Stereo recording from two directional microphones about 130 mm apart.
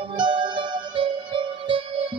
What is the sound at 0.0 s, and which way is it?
Music, 35° right (ahead or behind).